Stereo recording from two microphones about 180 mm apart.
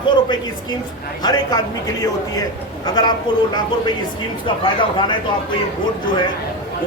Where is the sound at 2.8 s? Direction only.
25° left (ahead or behind).